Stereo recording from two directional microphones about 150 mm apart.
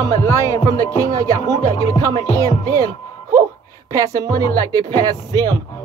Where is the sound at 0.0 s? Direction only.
25° right (ahead or behind).